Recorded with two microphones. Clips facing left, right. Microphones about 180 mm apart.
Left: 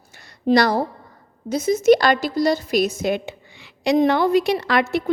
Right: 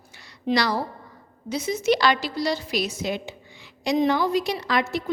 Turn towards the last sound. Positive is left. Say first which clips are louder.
# left 5 dB
turn(degrees=65)  # may be behind; listen again after turning